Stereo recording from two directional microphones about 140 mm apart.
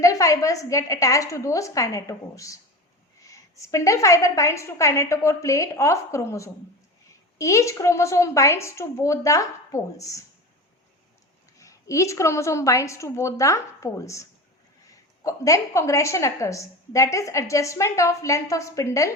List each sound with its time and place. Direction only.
0.0 s a woman's voice: 25° left (ahead or behind)
11.5 s a woman's voice: 20° left (ahead or behind)